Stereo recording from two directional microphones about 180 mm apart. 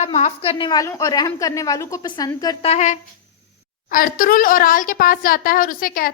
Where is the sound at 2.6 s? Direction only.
40° left (ahead or behind).